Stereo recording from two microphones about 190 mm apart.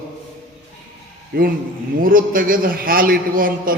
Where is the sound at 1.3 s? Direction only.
55° right (ahead or behind).